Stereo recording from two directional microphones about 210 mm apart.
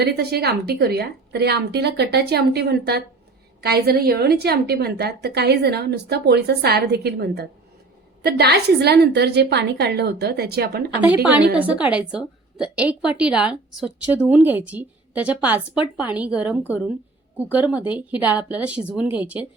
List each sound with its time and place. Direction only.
0.0 s a woman's voice: 50° right (ahead or behind)
11.0 s a woman's voice: 10° right (ahead or behind)